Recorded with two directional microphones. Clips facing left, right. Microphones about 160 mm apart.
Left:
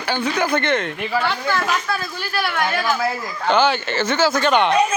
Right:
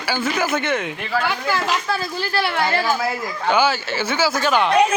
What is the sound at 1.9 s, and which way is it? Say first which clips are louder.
A woman's voice: right 2 dB; 30° right (ahead or behind).